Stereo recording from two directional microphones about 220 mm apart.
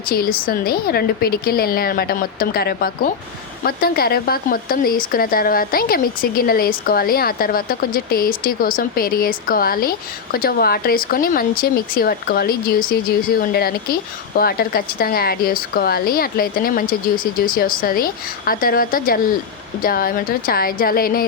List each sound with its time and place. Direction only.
0.1 s a woman's voice: 40° left (ahead or behind)